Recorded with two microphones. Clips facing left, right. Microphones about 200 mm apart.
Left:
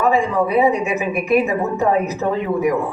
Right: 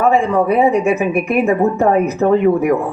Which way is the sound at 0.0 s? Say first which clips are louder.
Right 3 dB; 50° right (ahead or behind).